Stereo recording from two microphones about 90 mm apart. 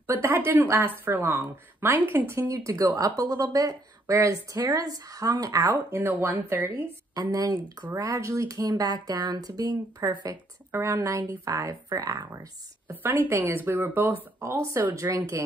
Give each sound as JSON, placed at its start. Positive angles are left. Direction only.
{"t": 0.0, "sound": "speech", "side_deg": -25}
{"t": 5.9, "sound": "speech", "side_deg": -20}
{"t": 7.2, "sound": "speech", "side_deg": -45}
{"t": 12.9, "sound": "speech", "side_deg": -20}